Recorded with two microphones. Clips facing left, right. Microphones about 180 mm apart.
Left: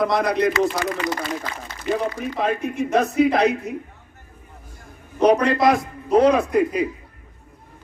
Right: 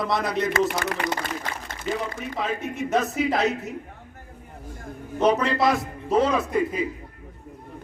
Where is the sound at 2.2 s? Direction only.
65° left (ahead or behind).